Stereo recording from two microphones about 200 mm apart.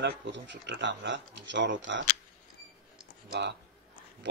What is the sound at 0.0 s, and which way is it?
Speech, 65° right (ahead or behind).